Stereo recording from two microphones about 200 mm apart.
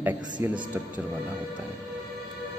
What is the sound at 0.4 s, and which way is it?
Speech, 30° left (ahead or behind).